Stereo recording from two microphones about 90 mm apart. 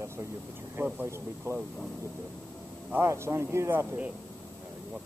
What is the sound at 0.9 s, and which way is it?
Speech, 25° right (ahead or behind).